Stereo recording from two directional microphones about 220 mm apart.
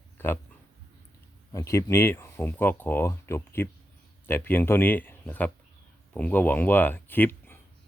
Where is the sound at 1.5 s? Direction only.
15° left (ahead or behind).